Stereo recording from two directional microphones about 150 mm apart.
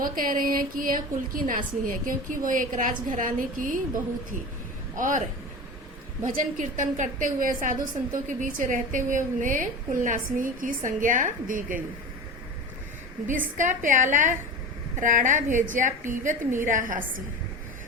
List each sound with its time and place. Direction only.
0.0 s a woman's voice: 65° right (ahead or behind)
6.2 s a woman's voice: 60° right (ahead or behind)
13.6 s a woman's voice: 55° right (ahead or behind)